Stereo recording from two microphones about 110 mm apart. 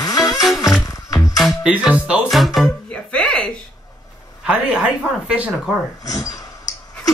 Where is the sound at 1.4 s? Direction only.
5° right (ahead or behind).